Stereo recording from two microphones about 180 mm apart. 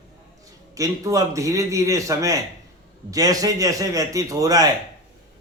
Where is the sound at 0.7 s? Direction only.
20° right (ahead or behind).